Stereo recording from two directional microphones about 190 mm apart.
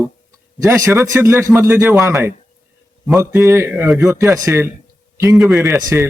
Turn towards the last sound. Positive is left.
turn(degrees=-15)  # may be behind; listen again after turning